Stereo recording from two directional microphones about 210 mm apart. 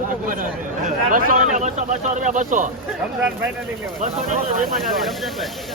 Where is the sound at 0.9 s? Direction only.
40° right (ahead or behind).